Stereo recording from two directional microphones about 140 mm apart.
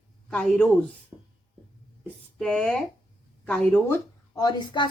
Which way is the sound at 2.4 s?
5° left (ahead or behind).